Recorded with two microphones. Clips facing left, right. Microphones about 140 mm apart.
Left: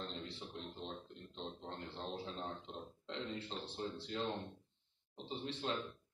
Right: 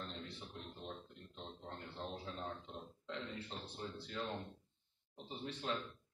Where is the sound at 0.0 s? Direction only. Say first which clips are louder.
Left 2 dB; 30° left (ahead or behind).